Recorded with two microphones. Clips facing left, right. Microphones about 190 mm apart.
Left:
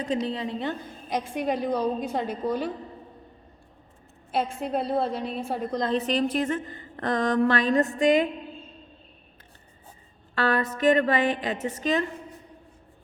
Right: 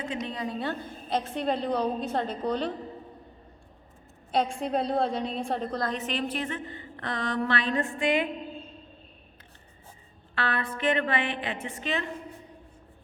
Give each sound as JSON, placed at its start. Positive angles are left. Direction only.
{"t": 0.0, "sound": "a woman's voice", "side_deg": 35}
{"t": 4.3, "sound": "a woman's voice", "side_deg": 5}
{"t": 5.8, "sound": "a woman's voice", "side_deg": 35}
{"t": 10.3, "sound": "a woman's voice", "side_deg": 40}